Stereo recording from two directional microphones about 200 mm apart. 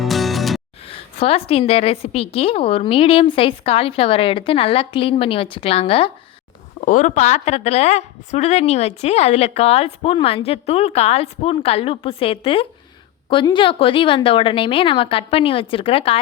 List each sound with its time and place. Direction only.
0.0 s music: centre (ahead or behind)
0.9 s a woman's voice: 30° left (ahead or behind)
6.8 s a woman's voice: 40° left (ahead or behind)